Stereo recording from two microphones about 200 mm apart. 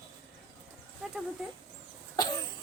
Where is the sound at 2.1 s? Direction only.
20° left (ahead or behind).